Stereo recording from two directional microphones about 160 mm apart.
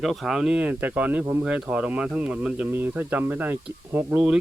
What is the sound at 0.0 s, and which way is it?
Speech, centre (ahead or behind).